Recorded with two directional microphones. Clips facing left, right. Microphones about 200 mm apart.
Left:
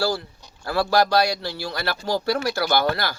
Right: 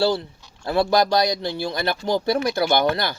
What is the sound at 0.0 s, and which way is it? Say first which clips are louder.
A man's voice: right 4 dB; 25° right (ahead or behind).